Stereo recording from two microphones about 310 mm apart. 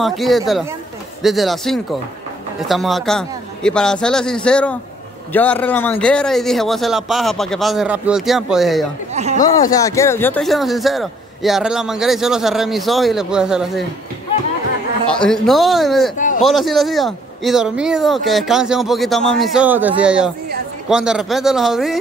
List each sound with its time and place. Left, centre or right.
0.0 s speech: centre
9.1 s a sound: right
9.4 s speech: centre
15.0 s speech: centre